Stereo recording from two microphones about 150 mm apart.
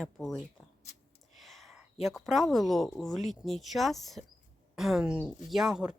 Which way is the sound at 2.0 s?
Centre (ahead or behind).